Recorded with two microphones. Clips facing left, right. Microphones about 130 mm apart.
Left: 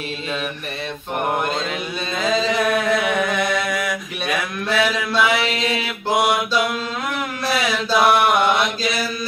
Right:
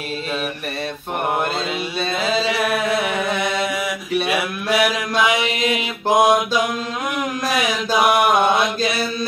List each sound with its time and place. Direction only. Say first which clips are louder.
2.2 s chant: left 3 dB; 5° right (ahead or behind)
7.4 s mantra: left 1 dB; 15° right (ahead or behind)